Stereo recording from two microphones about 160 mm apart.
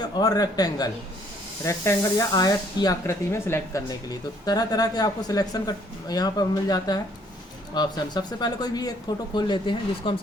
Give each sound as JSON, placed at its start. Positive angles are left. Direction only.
{"t": 0.0, "sound": "speech", "side_deg": 25}